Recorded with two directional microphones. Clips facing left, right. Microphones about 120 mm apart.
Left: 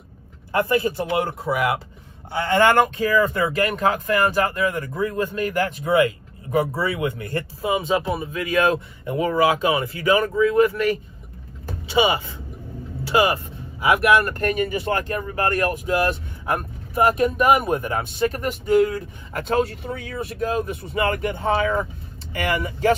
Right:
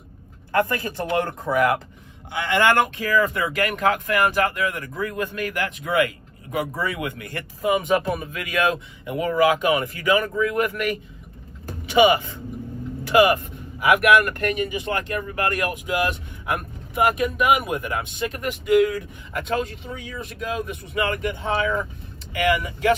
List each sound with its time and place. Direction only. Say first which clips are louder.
0.5 s speech: left 2 dB; 20° left (ahead or behind)
2.3 s speech: left 2 dB; 35° left (ahead or behind)
6.7 s speech: left 3 dB; 15° left (ahead or behind); by 7.7 s 35° left (ahead or behind)
7.7 s speech: even; 20° left (ahead or behind)
13.0 s speech: right 3 dB; 30° left (ahead or behind)